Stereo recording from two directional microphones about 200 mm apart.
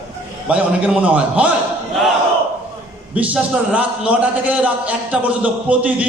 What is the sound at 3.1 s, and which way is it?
A man's voice, 5° right (ahead or behind).